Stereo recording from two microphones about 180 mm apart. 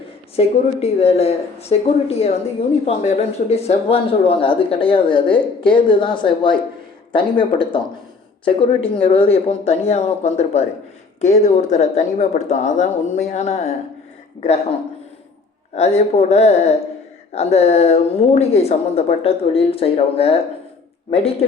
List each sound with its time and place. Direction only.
0.3 s a woman's voice: 35° left (ahead or behind)
8.8 s a woman's voice: 30° left (ahead or behind)